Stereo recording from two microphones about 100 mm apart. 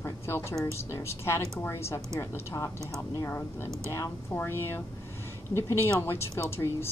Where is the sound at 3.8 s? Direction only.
30° left (ahead or behind).